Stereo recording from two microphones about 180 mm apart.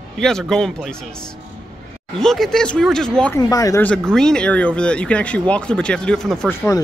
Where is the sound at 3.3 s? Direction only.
20° left (ahead or behind).